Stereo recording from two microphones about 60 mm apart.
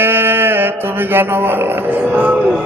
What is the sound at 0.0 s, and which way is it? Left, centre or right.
Mantra, right.